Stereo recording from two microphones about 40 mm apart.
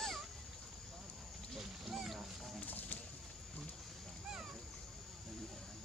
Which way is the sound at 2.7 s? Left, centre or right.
Left.